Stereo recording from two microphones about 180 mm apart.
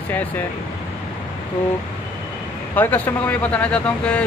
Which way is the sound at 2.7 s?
10° left (ahead or behind).